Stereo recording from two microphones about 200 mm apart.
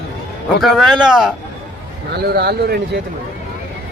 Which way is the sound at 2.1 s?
50° right (ahead or behind).